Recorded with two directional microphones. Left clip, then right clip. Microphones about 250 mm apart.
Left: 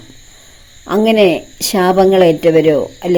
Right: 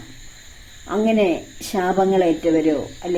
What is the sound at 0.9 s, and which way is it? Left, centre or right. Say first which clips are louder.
A woman's voice: left 8 dB; left.